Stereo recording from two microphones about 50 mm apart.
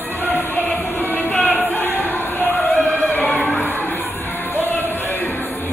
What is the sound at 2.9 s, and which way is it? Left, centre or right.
Singing, left.